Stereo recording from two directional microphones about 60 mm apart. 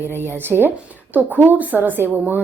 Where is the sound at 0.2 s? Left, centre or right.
Right.